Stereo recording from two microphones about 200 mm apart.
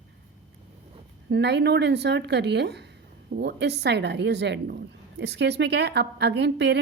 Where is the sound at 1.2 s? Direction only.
60° right (ahead or behind).